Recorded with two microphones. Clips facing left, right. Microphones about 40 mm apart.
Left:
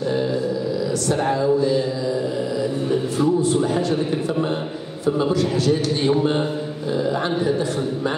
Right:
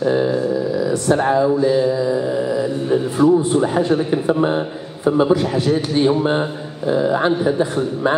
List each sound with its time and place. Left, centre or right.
1.0 s a man's voice: right